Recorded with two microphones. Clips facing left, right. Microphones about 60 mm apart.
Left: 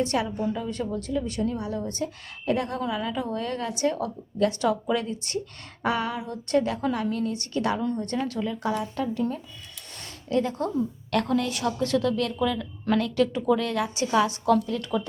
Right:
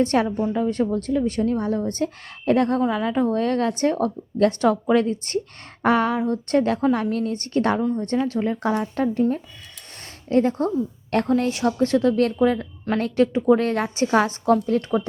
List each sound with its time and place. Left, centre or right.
0.0 s a woman's voice: right
10.2 s a woman's voice: right